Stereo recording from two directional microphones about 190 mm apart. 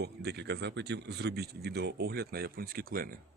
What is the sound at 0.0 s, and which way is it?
Speech, 60° right (ahead or behind).